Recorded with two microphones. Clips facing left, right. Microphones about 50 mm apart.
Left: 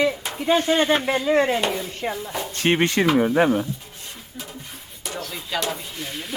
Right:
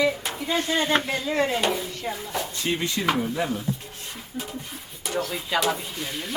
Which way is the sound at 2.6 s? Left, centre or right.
Left.